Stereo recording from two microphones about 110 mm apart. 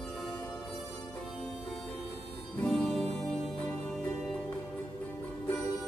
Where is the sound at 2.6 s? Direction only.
5° left (ahead or behind).